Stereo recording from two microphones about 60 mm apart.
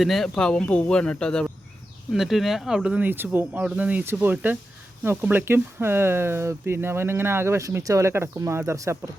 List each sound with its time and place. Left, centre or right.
0.0 s speech: centre
0.3 s a man's voice: centre
2.1 s speech: centre
3.0 s speech: right
3.6 s speech: centre
4.0 s speech: right
5.5 s speech: right